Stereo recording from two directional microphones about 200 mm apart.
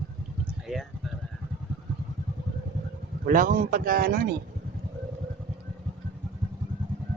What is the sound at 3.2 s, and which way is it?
Speech, 45° right (ahead or behind).